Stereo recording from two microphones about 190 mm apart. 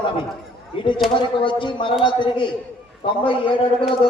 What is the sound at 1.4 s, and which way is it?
A man's voice, 25° left (ahead or behind).